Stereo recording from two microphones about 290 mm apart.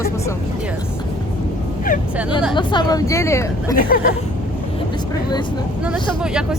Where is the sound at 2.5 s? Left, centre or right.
Centre.